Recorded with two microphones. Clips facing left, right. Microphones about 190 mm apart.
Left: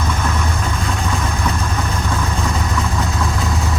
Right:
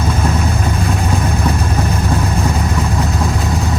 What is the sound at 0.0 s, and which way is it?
Vehicle, 35° right (ahead or behind).